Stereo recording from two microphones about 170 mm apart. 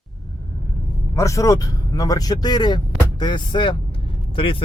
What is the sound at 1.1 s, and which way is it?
A man's voice, 20° left (ahead or behind).